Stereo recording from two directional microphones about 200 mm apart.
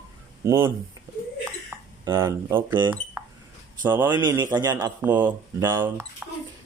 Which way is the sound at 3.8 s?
10° right (ahead or behind).